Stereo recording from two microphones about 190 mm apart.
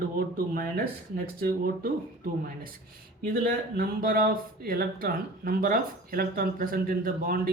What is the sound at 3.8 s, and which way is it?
Speech, 50° right (ahead or behind).